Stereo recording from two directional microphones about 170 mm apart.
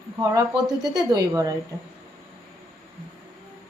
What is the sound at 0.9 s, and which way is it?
Speech, 20° right (ahead or behind).